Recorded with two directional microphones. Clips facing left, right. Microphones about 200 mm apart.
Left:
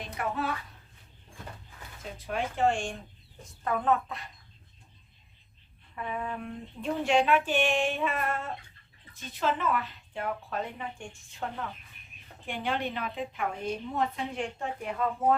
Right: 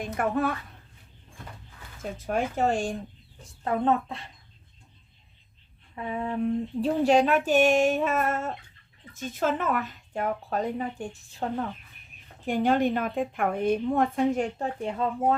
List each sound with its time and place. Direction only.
0.0 s a woman's voice: 50° right (ahead or behind)
2.0 s a woman's voice: 45° right (ahead or behind); by 4.3 s 30° right (ahead or behind)
5.9 s a sound: 25° right (ahead or behind); by 8.5 s 45° right (ahead or behind)
9.1 s a woman's voice: 45° right (ahead or behind); by 15.4 s 30° right (ahead or behind)